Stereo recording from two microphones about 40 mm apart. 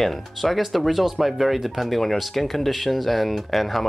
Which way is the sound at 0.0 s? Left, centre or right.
Centre.